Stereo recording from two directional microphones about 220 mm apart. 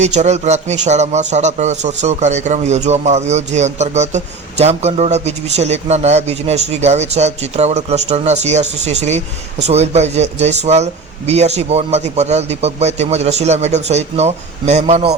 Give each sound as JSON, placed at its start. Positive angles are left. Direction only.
{"t": 0.0, "sound": "a man's voice", "side_deg": -30}